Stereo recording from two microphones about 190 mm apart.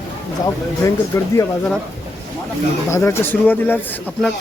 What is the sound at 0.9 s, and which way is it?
Speech, 15° left (ahead or behind).